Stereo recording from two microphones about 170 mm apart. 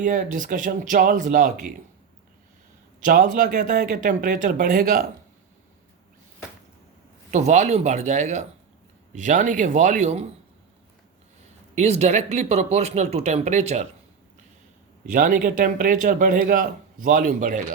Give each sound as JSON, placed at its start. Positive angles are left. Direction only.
{"t": 0.0, "sound": "speech", "side_deg": -50}
{"t": 3.0, "sound": "speech", "side_deg": -50}
{"t": 7.3, "sound": "speech", "side_deg": -45}
{"t": 11.7, "sound": "speech", "side_deg": -40}
{"t": 15.0, "sound": "speech", "side_deg": -50}